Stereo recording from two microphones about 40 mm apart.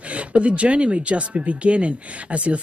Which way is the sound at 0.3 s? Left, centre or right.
Right.